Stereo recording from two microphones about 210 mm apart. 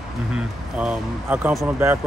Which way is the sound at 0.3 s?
5° right (ahead or behind).